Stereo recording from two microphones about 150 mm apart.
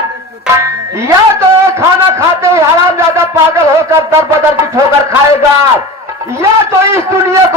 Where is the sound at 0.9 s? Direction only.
20° right (ahead or behind).